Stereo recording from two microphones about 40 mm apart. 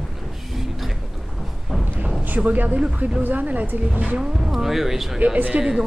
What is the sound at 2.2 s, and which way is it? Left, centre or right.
A woman's voice, right.